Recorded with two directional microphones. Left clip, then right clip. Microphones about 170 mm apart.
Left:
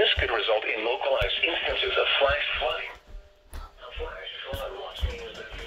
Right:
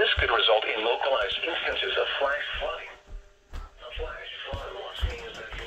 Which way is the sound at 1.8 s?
5° right (ahead or behind).